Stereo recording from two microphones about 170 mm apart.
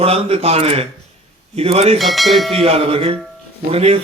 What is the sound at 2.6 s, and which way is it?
Mantra, 35° right (ahead or behind).